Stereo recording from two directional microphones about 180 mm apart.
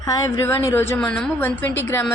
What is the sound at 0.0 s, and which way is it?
A woman's voice, 20° left (ahead or behind).